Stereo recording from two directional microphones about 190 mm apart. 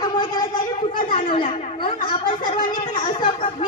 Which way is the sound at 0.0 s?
20° left (ahead or behind).